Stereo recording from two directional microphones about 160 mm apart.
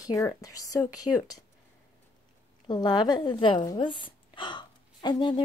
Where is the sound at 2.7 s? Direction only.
25° left (ahead or behind).